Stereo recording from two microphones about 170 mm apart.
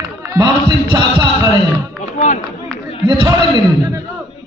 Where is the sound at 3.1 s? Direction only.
25° right (ahead or behind).